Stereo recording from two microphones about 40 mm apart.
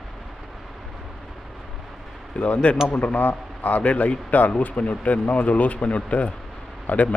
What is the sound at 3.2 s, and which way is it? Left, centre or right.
Speech, left.